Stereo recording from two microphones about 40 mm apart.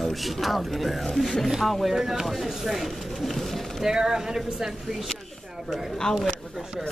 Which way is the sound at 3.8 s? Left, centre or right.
Centre.